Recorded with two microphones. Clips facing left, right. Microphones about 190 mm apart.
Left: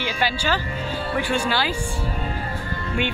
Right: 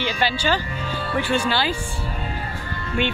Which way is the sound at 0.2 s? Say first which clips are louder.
Right 1 dB; 10° left (ahead or behind).